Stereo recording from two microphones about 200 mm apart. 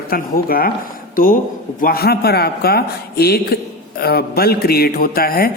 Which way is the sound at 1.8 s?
50° left (ahead or behind).